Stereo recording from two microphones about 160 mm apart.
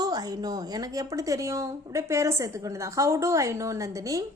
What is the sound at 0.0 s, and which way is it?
A woman's voice, 25° right (ahead or behind).